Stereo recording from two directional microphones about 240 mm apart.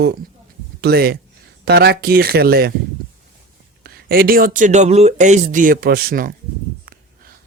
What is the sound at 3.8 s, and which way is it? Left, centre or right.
Speech, right.